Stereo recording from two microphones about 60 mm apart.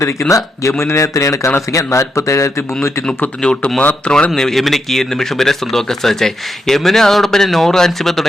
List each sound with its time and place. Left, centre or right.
0.0 s speech: left
3.4 s speech: centre
4.4 s speech: centre